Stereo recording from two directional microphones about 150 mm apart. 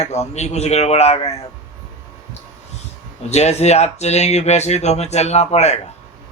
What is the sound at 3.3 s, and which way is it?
Speech, 45° left (ahead or behind).